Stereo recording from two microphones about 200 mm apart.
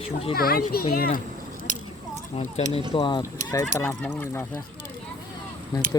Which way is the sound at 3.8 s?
10° left (ahead or behind).